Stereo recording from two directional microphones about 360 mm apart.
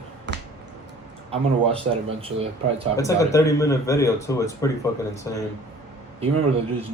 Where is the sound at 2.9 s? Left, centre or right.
Centre.